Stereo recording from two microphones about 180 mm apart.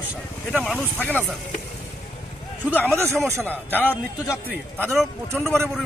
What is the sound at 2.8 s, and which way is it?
Speech, 15° right (ahead or behind).